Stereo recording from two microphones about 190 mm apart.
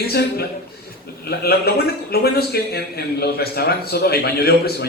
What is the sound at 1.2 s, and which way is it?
A man's voice, 55° left (ahead or behind).